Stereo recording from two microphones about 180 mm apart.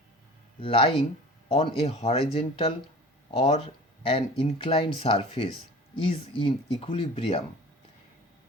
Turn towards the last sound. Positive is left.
turn(degrees=30)  # may be behind; listen again after turning